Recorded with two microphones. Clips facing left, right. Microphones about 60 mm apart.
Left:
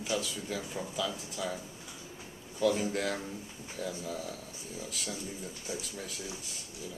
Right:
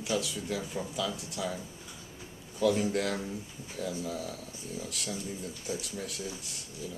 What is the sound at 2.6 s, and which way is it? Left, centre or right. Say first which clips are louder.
Speech: right 2 dB; centre.